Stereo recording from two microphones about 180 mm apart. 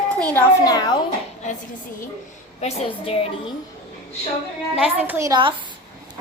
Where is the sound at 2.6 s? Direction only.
30° left (ahead or behind).